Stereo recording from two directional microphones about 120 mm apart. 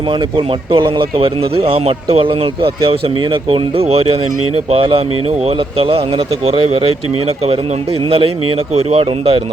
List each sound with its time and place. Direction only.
0.1 s speech: 40° right (ahead or behind)